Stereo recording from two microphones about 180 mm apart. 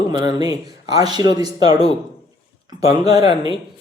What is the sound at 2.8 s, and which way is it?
Speech, 20° right (ahead or behind).